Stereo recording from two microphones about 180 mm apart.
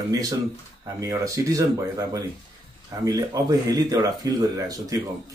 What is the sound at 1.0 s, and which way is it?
Speech, 20° right (ahead or behind).